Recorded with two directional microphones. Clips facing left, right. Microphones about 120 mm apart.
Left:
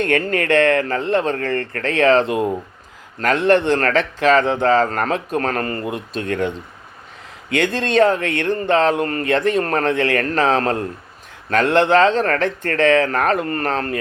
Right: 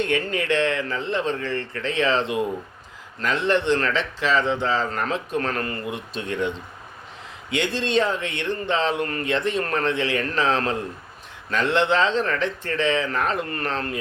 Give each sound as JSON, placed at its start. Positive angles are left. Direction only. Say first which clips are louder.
{"t": 0.0, "sound": "speech", "louder": "left 5 dB", "side_deg": 55}
{"t": 7.5, "sound": "speech", "louder": "left 5 dB", "side_deg": 50}